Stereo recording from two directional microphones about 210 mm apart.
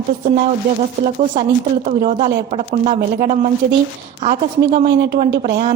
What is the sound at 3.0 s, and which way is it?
Speech, 45° right (ahead or behind).